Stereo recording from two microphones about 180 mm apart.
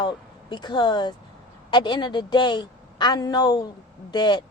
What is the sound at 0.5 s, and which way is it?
A woman's voice, 25° left (ahead or behind).